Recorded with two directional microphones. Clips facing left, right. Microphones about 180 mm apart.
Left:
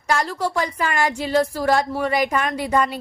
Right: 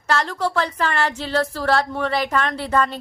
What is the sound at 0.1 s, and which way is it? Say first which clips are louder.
A woman's voice: even; 10° left (ahead or behind).